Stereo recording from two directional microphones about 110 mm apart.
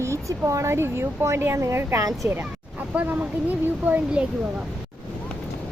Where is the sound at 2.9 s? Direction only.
15° right (ahead or behind).